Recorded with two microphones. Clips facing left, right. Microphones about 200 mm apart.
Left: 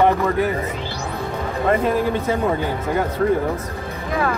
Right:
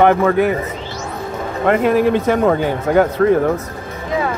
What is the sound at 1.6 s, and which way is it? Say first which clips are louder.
Speech: right 5 dB; 75° right (ahead or behind).